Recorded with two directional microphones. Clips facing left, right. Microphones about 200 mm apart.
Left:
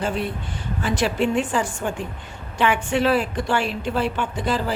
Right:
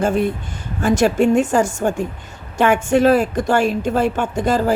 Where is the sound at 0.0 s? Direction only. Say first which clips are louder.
Right 7 dB; 45° right (ahead or behind).